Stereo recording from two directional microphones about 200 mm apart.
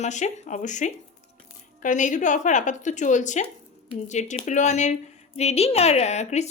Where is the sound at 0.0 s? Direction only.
35° left (ahead or behind).